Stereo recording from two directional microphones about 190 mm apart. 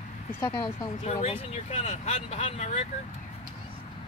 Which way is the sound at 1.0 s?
35° left (ahead or behind).